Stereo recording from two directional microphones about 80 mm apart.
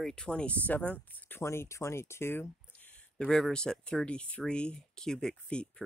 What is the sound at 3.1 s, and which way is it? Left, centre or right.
Speech, centre.